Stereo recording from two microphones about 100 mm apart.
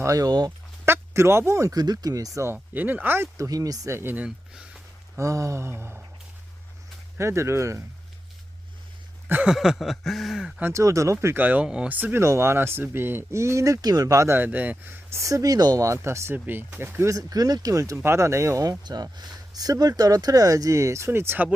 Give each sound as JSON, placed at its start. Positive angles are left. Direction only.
{"t": 0.0, "sound": "speech", "side_deg": -35}
{"t": 0.9, "sound": "speech", "side_deg": -25}
{"t": 2.7, "sound": "speech", "side_deg": -20}
{"t": 5.1, "sound": "speech", "side_deg": -30}
{"t": 7.2, "sound": "speech", "side_deg": -25}
{"t": 9.3, "sound": "a sound", "side_deg": -15}
{"t": 9.6, "sound": "a sound", "side_deg": 0}
{"t": 10.6, "sound": "speech", "side_deg": -30}